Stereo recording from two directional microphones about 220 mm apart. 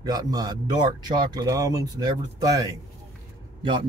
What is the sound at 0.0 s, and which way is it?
Speech, 15° right (ahead or behind).